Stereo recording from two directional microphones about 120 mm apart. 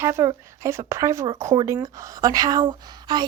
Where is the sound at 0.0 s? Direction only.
25° right (ahead or behind).